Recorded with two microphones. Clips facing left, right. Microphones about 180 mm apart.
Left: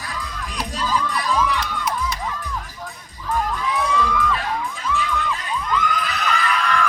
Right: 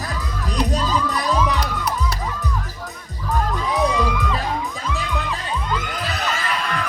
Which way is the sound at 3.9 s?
15° right (ahead or behind).